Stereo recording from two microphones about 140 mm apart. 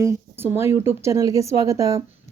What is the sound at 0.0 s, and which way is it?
Speech, 15° right (ahead or behind).